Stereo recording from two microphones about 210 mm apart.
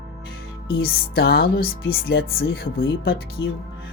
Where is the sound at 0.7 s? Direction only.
45° left (ahead or behind).